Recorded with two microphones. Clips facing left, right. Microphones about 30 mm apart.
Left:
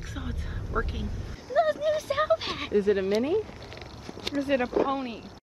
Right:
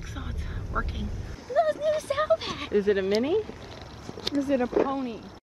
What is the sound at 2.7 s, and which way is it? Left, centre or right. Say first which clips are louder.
Speech: even; centre.